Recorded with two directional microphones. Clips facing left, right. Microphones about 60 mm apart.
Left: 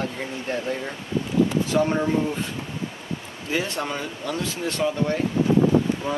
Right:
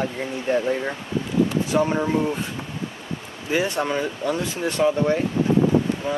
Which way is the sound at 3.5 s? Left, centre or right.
Right.